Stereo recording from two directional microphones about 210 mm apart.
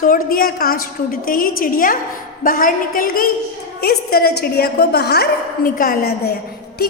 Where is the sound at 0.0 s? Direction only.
40° left (ahead or behind).